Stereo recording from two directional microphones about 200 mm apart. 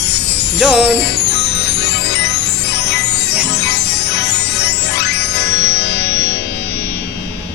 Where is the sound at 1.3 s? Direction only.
60° left (ahead or behind).